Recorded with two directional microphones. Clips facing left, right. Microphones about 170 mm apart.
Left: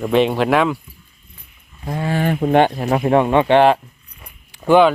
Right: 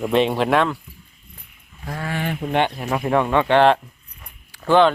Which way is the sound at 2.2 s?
45° left (ahead or behind).